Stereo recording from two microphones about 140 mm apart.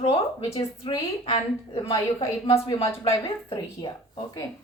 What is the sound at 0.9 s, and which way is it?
A woman's voice, 35° left (ahead or behind).